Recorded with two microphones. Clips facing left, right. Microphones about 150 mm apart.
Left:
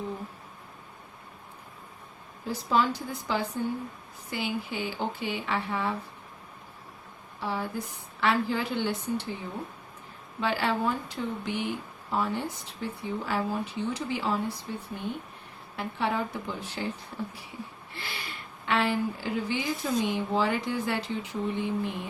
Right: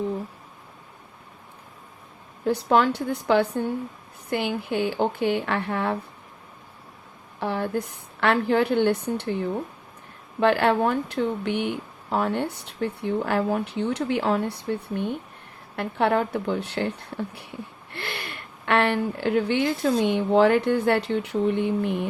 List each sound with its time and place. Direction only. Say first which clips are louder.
2.5 s speech: right 6 dB; 65° right (ahead or behind)
7.3 s speech: right 6 dB; 60° right (ahead or behind)
17.9 s a woman's voice: right 6 dB; 65° right (ahead or behind)